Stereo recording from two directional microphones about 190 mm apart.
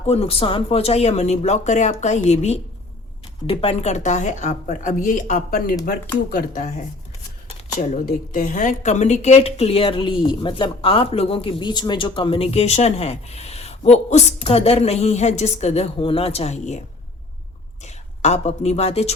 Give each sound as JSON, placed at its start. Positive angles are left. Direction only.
{"t": 0.0, "sound": "a woman's voice", "side_deg": 30}
{"t": 17.8, "sound": "speech", "side_deg": 35}